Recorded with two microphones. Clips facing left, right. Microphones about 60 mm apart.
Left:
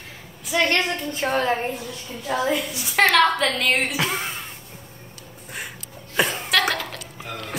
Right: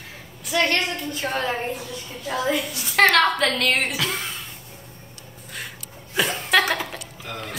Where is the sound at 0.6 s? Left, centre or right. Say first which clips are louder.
Left 1 dB; left.